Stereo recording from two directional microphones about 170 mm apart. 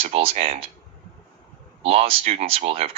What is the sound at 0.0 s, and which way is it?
Speech, 35° right (ahead or behind).